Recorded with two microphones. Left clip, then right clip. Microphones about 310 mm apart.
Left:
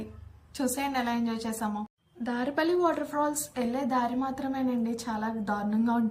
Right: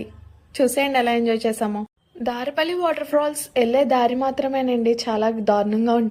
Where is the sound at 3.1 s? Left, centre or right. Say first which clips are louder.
Right 9 dB; right.